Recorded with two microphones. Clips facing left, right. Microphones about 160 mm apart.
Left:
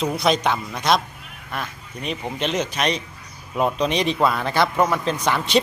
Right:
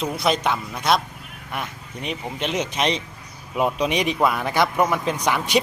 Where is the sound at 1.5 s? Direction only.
15° right (ahead or behind).